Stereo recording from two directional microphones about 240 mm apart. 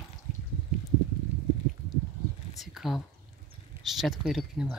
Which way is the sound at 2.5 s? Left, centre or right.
Centre.